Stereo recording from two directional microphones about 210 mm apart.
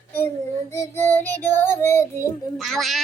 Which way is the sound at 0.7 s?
15° left (ahead or behind).